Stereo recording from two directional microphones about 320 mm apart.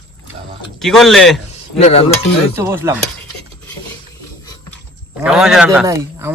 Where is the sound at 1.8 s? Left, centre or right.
Centre.